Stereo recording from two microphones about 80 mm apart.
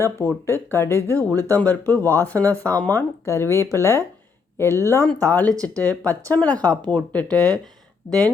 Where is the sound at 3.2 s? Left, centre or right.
Left.